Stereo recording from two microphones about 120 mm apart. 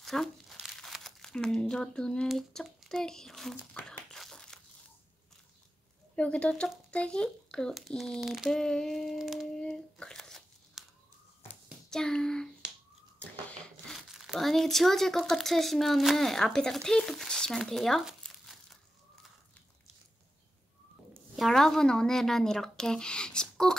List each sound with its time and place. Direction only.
0.0 s crumpling: centre (ahead or behind)
6.1 s speech: 10° left (ahead or behind)
6.9 s crumpling: 10° left (ahead or behind)
11.9 s a sound: 5° left (ahead or behind)
13.9 s speech: centre (ahead or behind)
21.4 s speech: centre (ahead or behind)